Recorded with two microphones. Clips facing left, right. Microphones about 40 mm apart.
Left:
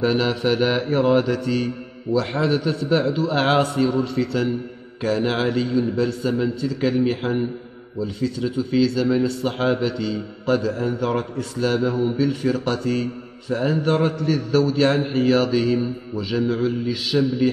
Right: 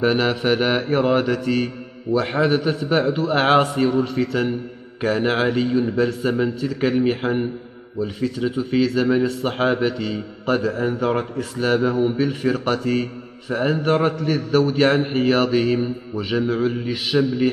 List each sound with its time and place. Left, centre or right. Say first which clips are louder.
0.0 s a man's voice: right 1 dB; centre
8.2 s a man's voice: even; right
11.9 s a man's voice: right 1 dB; centre
15.6 s a man's voice: right 1 dB; right
16.4 s a man's voice: right 1 dB; centre
16.8 s a man's voice: right 1 dB; right